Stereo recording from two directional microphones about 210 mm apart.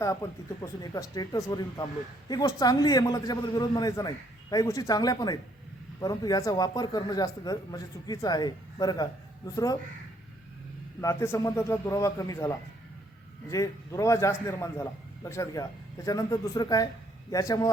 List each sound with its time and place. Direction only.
0.6 s speech: 15° left (ahead or behind)
11.0 s speech: 15° left (ahead or behind)